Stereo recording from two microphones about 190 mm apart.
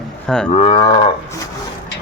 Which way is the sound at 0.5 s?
30° left (ahead or behind).